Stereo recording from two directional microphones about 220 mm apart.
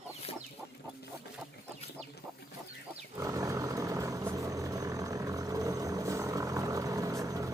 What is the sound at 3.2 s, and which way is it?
Helicopter, 15° right (ahead or behind).